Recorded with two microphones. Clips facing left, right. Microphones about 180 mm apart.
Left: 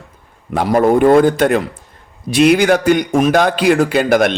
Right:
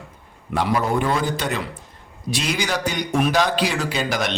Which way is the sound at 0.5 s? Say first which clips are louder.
Left 9 dB; 50° left (ahead or behind).